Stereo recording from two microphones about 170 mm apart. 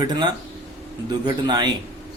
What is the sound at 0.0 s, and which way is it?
Speech, 25° right (ahead or behind).